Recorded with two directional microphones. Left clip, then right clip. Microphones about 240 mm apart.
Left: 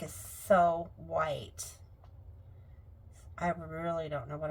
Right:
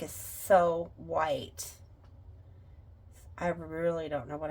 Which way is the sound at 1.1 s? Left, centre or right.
Right.